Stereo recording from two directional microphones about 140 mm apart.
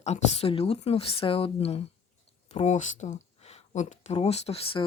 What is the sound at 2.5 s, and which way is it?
Speech, 55° left (ahead or behind).